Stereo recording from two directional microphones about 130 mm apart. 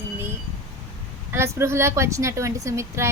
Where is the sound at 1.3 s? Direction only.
20° right (ahead or behind).